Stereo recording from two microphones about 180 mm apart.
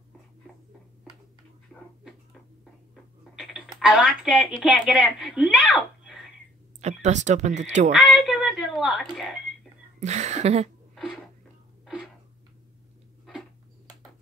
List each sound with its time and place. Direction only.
1.7 s a sound: 5° left (ahead or behind)
3.3 s speech: centre (ahead or behind)
6.8 s speech: 40° right (ahead or behind)
7.9 s speech: centre (ahead or behind)
9.9 s speech: 40° right (ahead or behind)
11.8 s a sound: centre (ahead or behind)